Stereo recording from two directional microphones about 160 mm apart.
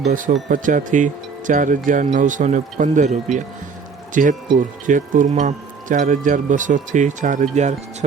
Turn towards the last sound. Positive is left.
turn(degrees=-50)  # may be behind; listen again after turning